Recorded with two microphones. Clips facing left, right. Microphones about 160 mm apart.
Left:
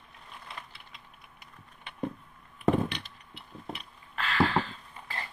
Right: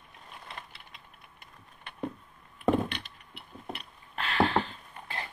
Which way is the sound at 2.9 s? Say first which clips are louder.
Even; 55° right (ahead or behind).